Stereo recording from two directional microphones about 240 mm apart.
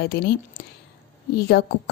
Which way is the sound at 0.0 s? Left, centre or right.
Left.